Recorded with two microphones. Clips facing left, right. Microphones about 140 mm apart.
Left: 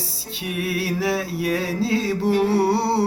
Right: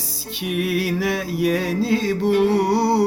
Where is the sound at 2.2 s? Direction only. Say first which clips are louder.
Right 1 dB; 35° left (ahead or behind).